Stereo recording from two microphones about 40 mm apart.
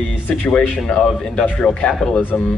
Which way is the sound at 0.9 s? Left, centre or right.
Left.